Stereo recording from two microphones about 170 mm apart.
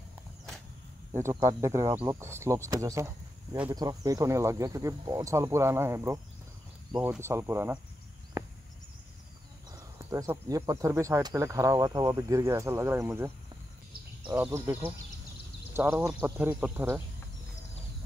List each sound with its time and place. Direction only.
1.2 s speech: 20° right (ahead or behind)
9.7 s speech: 20° right (ahead or behind)
14.3 s speech: 15° right (ahead or behind)